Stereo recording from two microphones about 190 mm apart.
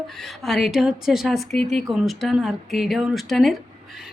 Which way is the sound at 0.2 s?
Centre (ahead or behind).